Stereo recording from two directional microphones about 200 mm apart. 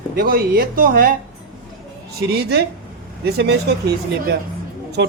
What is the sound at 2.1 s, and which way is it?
Speech, 50° right (ahead or behind).